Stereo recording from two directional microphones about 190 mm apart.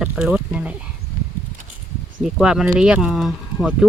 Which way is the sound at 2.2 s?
5° right (ahead or behind).